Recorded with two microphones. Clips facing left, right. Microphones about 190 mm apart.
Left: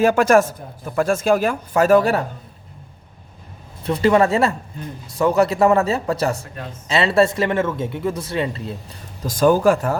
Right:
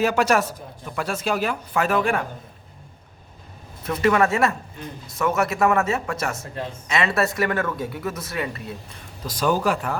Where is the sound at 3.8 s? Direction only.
30° left (ahead or behind).